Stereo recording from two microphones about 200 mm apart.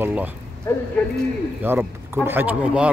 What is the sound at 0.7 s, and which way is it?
Speech, 10° left (ahead or behind).